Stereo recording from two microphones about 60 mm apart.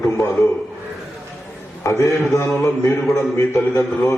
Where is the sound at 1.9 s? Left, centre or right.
Left.